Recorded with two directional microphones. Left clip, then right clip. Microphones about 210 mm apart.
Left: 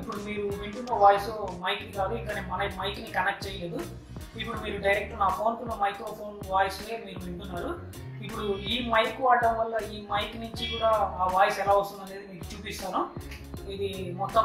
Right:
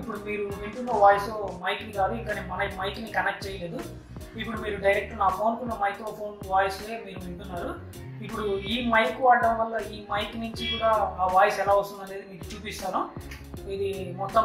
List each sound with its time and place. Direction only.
0.0 s speech: centre (ahead or behind)
4.4 s speech: centre (ahead or behind)
13.8 s speech: centre (ahead or behind)